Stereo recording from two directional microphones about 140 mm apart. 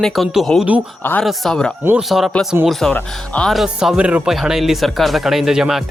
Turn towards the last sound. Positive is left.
turn(degrees=-5)  # may be behind; listen again after turning